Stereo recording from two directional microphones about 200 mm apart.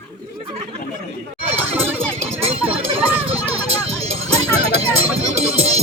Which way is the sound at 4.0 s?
30° right (ahead or behind).